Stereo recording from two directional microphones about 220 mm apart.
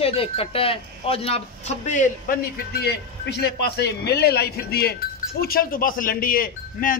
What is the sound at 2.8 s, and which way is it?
A man's voice, 50° left (ahead or behind).